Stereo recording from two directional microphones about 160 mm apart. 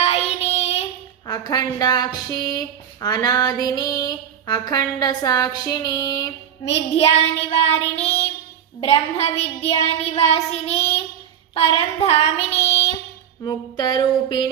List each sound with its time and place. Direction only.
0.0 s child singing: 40° left (ahead or behind)
1.3 s a woman's voice: 25° left (ahead or behind)
6.7 s child singing: 40° left (ahead or behind)
13.4 s a woman's voice: 25° left (ahead or behind)